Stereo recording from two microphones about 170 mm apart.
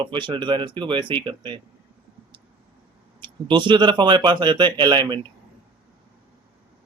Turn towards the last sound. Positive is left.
turn(degrees=-25)  # may be behind; listen again after turning